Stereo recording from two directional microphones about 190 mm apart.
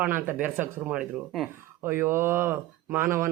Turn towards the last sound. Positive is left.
turn(degrees=-15)  # may be behind; listen again after turning